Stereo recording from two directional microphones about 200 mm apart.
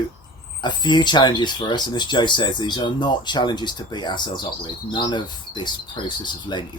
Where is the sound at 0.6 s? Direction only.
20° left (ahead or behind).